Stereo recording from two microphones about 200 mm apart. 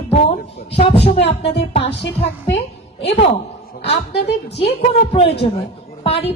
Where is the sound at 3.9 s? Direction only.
60° left (ahead or behind).